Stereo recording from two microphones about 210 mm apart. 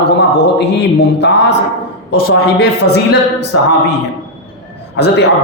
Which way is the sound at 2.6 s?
50° left (ahead or behind).